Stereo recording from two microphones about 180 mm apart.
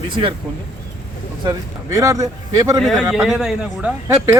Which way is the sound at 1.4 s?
20° right (ahead or behind).